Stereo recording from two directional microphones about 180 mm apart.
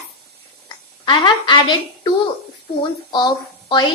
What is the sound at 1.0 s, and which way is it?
Speech, 25° left (ahead or behind).